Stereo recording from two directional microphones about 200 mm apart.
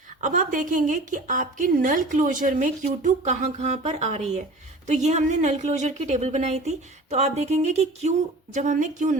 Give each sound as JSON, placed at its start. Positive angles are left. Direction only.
{"t": 0.2, "sound": "a woman's voice", "side_deg": -40}